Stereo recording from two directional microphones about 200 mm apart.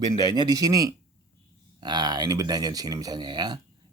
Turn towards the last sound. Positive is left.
turn(degrees=-20)  # may be behind; listen again after turning